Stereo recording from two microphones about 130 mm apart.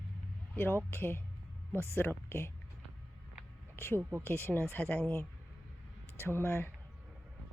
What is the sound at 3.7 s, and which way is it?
Speech, 15° left (ahead or behind).